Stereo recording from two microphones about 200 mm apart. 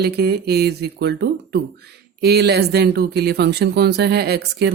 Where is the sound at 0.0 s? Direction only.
55° right (ahead or behind).